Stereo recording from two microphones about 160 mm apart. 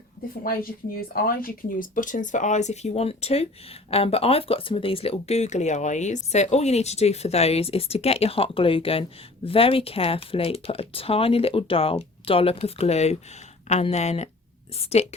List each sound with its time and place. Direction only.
0.4 s speech: 65° left (ahead or behind); by 15.0 s 40° left (ahead or behind)